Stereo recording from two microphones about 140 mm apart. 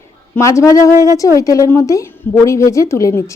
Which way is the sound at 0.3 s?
20° left (ahead or behind).